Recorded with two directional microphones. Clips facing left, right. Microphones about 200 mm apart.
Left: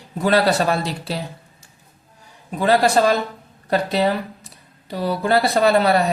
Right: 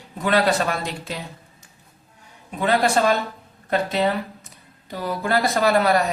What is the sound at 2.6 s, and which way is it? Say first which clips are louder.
Speech: left 3 dB; 35° left (ahead or behind).